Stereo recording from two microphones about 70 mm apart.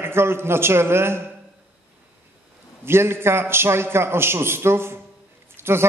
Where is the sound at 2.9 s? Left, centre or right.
Right.